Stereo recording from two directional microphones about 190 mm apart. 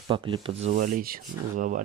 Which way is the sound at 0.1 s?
25° right (ahead or behind).